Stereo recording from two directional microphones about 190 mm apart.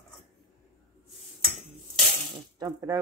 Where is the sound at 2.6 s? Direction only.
20° right (ahead or behind).